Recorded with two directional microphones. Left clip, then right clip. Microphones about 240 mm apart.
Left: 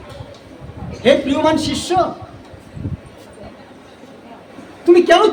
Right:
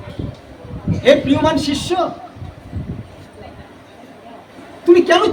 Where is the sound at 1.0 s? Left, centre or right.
Centre.